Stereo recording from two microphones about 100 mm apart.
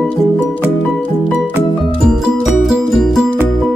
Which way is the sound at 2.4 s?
5° right (ahead or behind).